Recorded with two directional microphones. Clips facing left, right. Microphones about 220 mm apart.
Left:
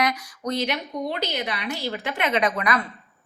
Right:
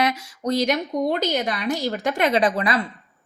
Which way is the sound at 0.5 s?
45° right (ahead or behind).